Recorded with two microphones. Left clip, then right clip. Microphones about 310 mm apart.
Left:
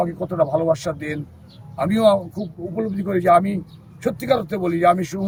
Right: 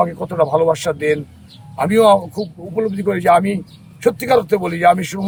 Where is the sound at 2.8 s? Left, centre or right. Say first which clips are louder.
Right 5 dB; centre.